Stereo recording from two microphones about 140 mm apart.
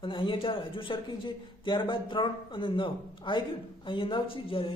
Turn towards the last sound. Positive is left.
turn(degrees=40)  # may be behind; listen again after turning